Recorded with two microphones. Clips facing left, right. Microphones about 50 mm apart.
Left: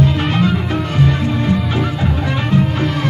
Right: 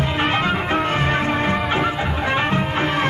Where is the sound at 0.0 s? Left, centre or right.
Right.